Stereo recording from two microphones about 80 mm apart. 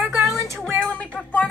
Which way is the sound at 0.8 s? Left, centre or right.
Centre.